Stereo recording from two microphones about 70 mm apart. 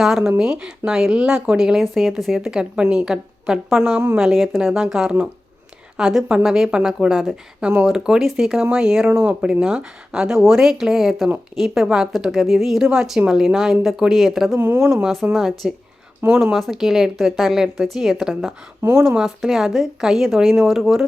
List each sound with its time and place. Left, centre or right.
0.0 s speech: centre
4.2 s a woman's voice: centre
18.8 s speech: right
19.0 s a woman's voice: centre